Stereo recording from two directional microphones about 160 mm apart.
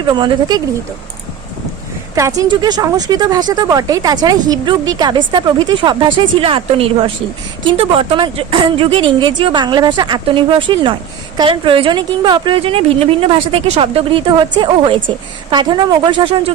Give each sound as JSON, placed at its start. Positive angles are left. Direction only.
{"t": 0.1, "sound": "speech", "side_deg": -25}
{"t": 2.1, "sound": "a woman's voice", "side_deg": -20}